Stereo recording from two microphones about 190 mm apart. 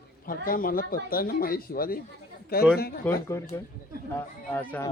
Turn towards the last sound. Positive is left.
turn(degrees=10)  # may be behind; listen again after turning